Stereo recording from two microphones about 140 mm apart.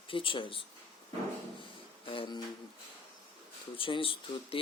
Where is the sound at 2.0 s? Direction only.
35° left (ahead or behind).